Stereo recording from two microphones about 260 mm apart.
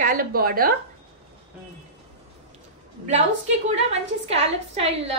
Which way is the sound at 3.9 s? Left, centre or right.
Right.